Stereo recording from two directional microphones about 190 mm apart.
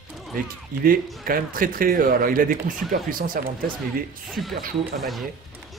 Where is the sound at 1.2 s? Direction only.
50° right (ahead or behind).